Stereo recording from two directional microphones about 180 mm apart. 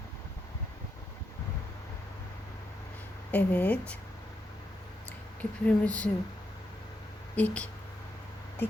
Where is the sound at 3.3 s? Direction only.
10° left (ahead or behind).